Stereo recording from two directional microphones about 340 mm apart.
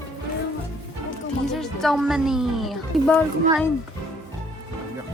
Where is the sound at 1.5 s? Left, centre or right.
Centre.